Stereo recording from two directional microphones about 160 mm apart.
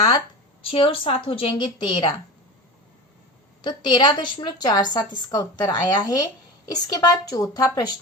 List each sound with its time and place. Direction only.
0.6 s a woman's voice: 35° left (ahead or behind)
3.6 s a woman's voice: 30° left (ahead or behind)